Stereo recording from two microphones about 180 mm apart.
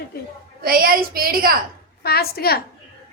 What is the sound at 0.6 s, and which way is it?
Speech, 55° right (ahead or behind).